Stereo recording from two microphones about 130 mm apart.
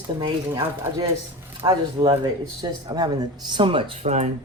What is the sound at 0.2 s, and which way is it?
Speech, 40° right (ahead or behind).